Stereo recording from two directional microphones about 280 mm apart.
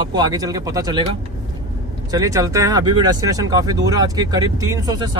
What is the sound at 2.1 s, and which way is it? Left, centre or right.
Speech, centre.